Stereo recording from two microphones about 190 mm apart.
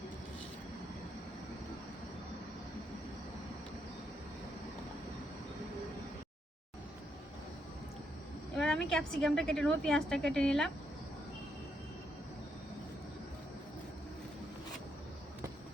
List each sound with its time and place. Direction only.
8.5 s a woman's voice: 5° left (ahead or behind)